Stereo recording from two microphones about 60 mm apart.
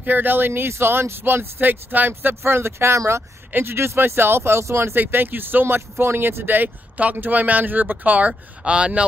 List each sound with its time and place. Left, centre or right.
0.0 s speech: right
4.9 s speech: right; by 9.0 s centre